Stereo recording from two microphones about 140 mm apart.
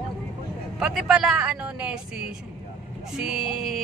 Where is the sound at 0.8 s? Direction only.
5° right (ahead or behind).